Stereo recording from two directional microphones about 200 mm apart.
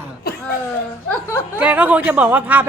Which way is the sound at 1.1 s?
10° left (ahead or behind).